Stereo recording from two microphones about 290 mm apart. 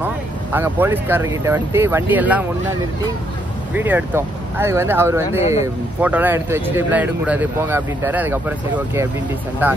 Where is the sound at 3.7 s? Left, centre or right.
Centre.